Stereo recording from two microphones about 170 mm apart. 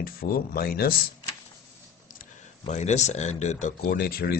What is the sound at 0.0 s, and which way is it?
Speech, 60° left (ahead or behind).